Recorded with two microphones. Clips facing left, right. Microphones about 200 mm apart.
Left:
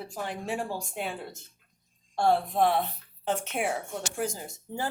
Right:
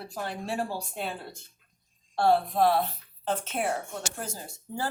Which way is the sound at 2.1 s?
20° left (ahead or behind).